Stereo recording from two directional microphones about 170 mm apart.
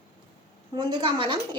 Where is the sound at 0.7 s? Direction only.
25° right (ahead or behind).